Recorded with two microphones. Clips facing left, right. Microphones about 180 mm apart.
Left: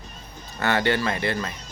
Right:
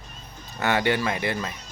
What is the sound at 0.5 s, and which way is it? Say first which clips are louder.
Speech: even; 15° right (ahead or behind).